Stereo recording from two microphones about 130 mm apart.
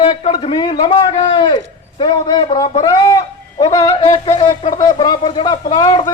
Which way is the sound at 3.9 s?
45° left (ahead or behind).